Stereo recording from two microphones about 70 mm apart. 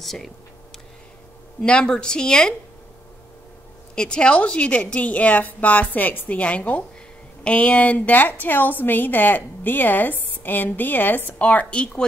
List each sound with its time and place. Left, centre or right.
0.0 s speech: centre
1.6 s speech: centre
3.9 s a woman's voice: centre